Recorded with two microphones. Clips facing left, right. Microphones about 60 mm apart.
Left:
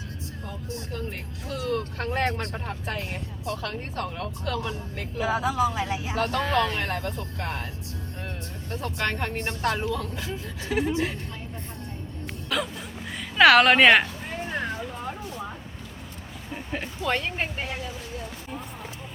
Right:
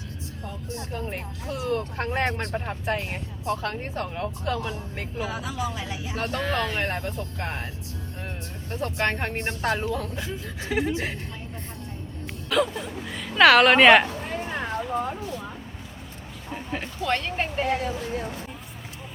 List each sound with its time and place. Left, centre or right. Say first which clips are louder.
1.5 s speech: right 1 dB; right
5.2 s speech: left 7 dB; left
6.1 s speech: left 3 dB; right
6.4 s a woman's voice: even; centre
6.8 s speech: right 1 dB; right
8.7 s speech: right 3 dB; right
9.6 s speech: even; centre
9.8 s speech: right 1 dB; right
12.5 s whimper: right 5 dB; centre
13.1 s a woman's voice: even; centre
14.5 s a sound: right 4 dB; centre
16.7 s a woman's voice: right 1 dB; centre